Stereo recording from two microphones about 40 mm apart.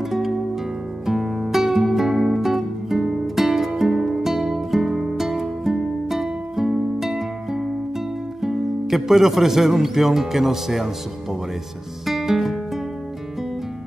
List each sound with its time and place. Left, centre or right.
1.0 s music: centre
8.4 s speech: centre
12.1 s music: centre